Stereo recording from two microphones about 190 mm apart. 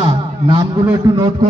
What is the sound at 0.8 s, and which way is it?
Speech, 15° right (ahead or behind).